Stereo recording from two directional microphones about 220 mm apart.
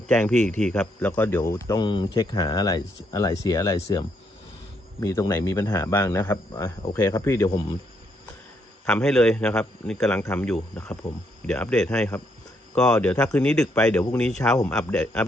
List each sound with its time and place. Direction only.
0.1 s speech: 10° left (ahead or behind)
8.9 s a man's voice: 5° left (ahead or behind)